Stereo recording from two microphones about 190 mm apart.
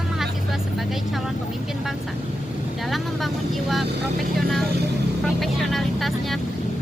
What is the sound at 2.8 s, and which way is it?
Speech, centre (ahead or behind).